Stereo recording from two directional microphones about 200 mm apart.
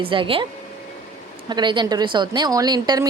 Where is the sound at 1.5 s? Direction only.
20° right (ahead or behind).